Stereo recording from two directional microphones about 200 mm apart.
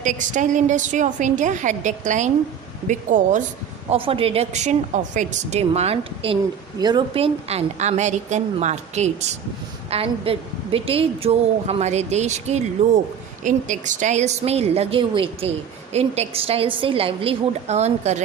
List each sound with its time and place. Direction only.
0.0 s a woman's voice: 40° right (ahead or behind)
3.8 s a woman's voice: 25° right (ahead or behind)
6.7 s a woman's voice: 20° right (ahead or behind)